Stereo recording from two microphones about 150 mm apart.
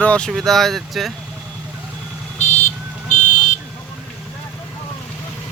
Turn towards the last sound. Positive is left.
turn(degrees=55)  # may be behind; listen again after turning